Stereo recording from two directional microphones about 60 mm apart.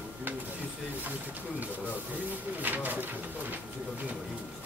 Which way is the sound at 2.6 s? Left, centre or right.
Right.